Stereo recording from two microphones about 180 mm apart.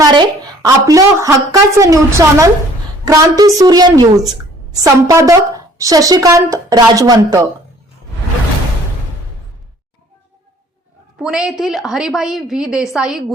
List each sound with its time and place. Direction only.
0.0 s a woman's voice: 25° right (ahead or behind)
11.2 s a woman's voice: 5° right (ahead or behind)